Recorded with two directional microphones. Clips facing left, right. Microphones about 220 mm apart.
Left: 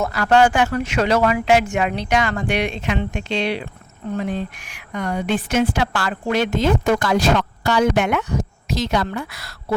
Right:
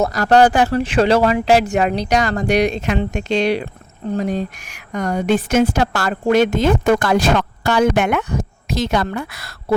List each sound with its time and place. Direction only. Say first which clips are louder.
0.0 s a woman's voice: right 3 dB; 40° right (ahead or behind)